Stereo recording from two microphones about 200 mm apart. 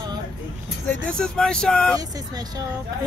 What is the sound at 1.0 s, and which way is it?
Speech, 5° left (ahead or behind).